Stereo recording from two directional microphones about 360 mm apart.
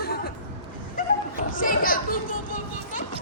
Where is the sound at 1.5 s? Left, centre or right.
Left.